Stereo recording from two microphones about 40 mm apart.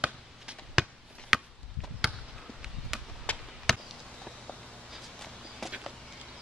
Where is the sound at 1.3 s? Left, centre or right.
Centre.